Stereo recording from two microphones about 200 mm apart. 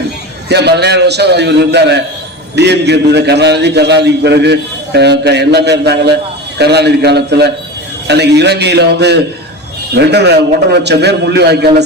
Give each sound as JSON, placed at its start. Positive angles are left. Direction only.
{"t": 0.4, "sound": "a man's voice", "side_deg": -55}